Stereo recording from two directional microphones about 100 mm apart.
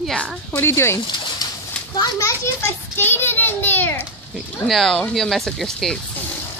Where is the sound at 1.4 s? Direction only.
40° left (ahead or behind).